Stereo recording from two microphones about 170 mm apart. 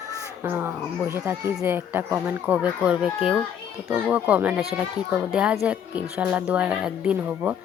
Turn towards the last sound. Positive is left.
turn(degrees=-10)  # may be behind; listen again after turning